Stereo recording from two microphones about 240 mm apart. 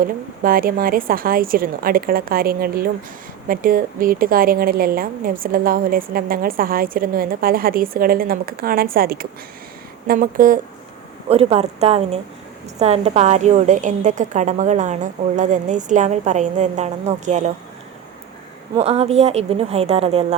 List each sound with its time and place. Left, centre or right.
0.0 s a woman's voice: right
18.8 s a woman's voice: right